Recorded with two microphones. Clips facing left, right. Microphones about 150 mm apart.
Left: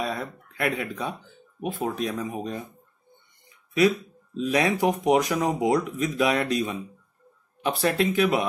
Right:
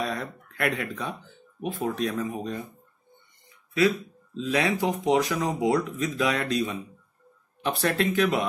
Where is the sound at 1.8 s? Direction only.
25° left (ahead or behind).